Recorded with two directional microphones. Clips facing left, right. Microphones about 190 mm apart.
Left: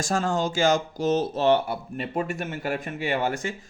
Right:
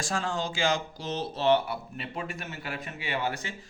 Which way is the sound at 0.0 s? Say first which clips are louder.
Left 6 dB; 45° left (ahead or behind).